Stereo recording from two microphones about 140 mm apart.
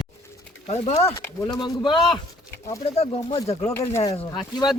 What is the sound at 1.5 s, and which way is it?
Speech, 30° left (ahead or behind).